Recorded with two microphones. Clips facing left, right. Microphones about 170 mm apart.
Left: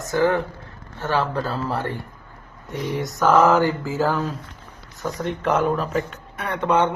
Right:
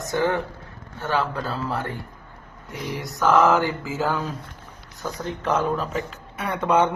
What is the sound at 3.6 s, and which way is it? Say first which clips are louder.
Speech: left 4 dB; 15° right (ahead or behind).